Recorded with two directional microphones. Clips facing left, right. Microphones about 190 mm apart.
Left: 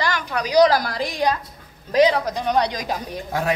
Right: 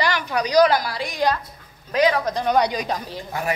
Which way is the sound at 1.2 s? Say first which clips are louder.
Right 2 dB; 20° left (ahead or behind).